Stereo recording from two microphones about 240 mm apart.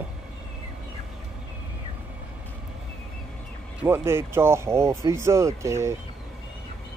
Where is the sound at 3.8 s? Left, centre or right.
Centre.